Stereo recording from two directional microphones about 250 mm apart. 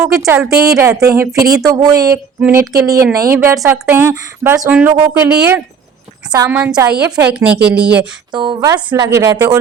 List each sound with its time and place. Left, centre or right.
0.3 s speech: centre
8.3 s speech: centre